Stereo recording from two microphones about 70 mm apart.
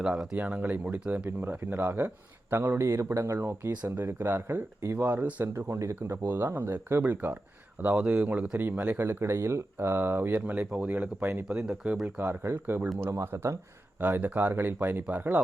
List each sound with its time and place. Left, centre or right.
0.0 s speech: centre
0.3 s speech: centre; by 4.9 s right
4.9 s speech: right
5.5 s speech: right
6.0 s speech: right
9.0 s speech: right
11.4 s speech: centre
12.0 s speech: right
13.1 s speech: right
14.0 s speech: right